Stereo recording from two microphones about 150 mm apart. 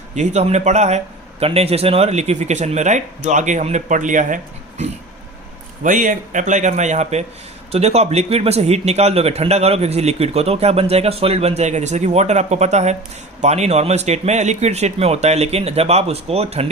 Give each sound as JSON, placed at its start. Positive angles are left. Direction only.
{"t": 0.2, "sound": "a man's voice", "side_deg": -50}
{"t": 5.8, "sound": "a man's voice", "side_deg": -60}